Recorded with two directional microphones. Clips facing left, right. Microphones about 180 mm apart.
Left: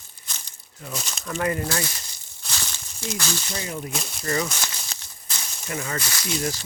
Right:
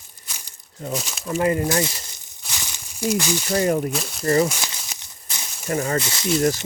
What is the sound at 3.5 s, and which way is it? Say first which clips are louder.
Speech: right 12 dB; 55° right (ahead or behind).